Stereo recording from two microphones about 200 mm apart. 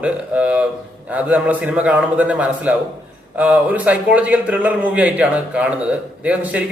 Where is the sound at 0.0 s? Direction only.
5° right (ahead or behind).